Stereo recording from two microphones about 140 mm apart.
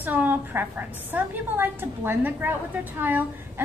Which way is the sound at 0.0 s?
15° right (ahead or behind).